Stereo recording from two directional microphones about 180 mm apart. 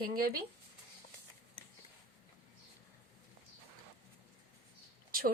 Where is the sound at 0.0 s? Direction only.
55° right (ahead or behind).